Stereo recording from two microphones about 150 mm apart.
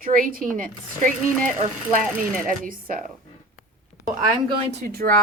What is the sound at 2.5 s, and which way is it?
Speech, 65° right (ahead or behind).